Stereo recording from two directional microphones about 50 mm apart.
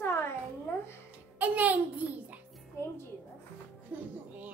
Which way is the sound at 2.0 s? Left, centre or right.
Right.